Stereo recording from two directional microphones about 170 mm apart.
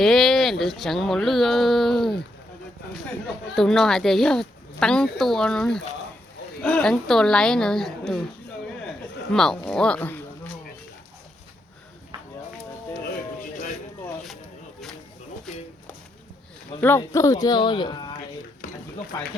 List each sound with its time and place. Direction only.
0.0 s a sound: centre (ahead or behind)
0.6 s speech: centre (ahead or behind)
9.3 s speech: 5° left (ahead or behind)
16.8 s speech: 15° left (ahead or behind)